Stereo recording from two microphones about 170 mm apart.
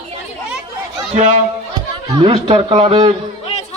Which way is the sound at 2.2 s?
35° right (ahead or behind).